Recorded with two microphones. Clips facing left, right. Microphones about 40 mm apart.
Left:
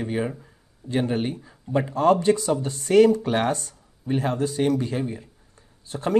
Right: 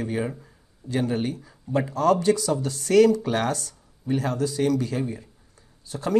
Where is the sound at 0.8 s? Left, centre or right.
Left.